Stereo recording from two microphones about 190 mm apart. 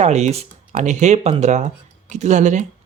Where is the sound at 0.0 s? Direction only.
35° right (ahead or behind).